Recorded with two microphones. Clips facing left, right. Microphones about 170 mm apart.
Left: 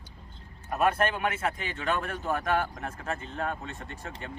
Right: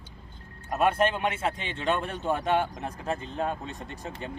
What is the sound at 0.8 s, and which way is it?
A man's voice, 25° right (ahead or behind).